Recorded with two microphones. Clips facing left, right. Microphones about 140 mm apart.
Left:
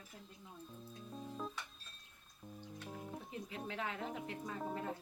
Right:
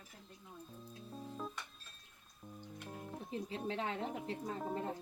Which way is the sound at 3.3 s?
30° right (ahead or behind).